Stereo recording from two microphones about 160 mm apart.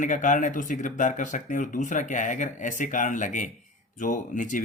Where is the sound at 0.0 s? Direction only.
55° left (ahead or behind).